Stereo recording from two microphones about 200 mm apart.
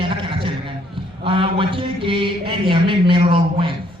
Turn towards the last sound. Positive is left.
turn(degrees=-25)  # may be behind; listen again after turning